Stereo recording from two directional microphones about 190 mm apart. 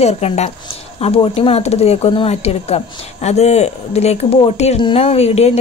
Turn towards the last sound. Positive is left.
turn(degrees=35)  # may be behind; listen again after turning